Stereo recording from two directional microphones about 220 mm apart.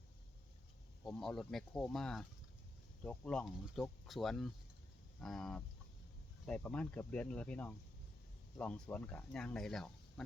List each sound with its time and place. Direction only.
1.0 s speech: centre (ahead or behind)